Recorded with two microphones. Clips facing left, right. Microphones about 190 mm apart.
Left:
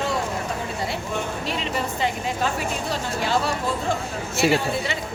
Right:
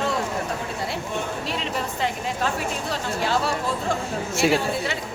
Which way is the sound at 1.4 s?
Centre (ahead or behind).